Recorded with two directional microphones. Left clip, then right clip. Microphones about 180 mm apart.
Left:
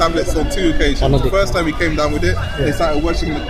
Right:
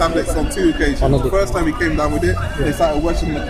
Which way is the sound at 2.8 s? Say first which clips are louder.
Right 2 dB; 5° right (ahead or behind).